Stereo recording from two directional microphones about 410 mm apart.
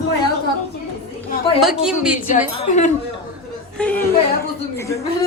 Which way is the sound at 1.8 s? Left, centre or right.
Centre.